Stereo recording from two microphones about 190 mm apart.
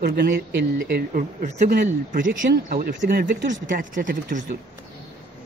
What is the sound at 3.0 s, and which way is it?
Speech, 60° right (ahead or behind).